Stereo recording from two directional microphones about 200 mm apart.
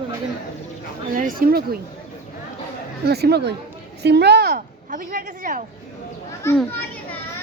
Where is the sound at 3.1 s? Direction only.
55° right (ahead or behind).